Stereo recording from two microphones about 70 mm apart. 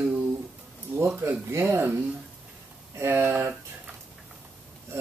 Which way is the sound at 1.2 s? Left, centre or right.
Right.